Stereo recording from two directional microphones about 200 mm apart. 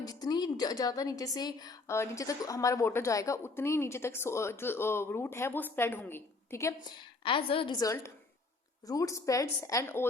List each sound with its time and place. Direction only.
0.0 s a woman's voice: 20° left (ahead or behind)
7.3 s a woman's voice: 25° left (ahead or behind); by 10.1 s 10° left (ahead or behind)